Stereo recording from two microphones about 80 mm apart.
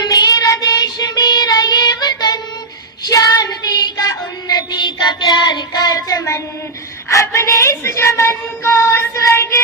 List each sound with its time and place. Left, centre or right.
0.0 s child singing: left
7.1 s a woman's voice: left